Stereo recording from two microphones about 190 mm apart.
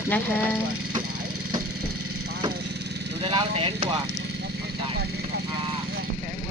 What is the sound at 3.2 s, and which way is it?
Speech, 30° right (ahead or behind).